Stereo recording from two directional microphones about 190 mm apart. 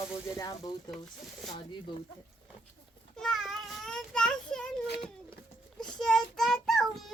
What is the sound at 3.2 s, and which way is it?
Child singing, centre (ahead or behind).